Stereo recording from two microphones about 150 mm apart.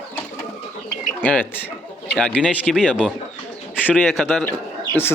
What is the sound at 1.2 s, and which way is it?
Speech, 10° left (ahead or behind).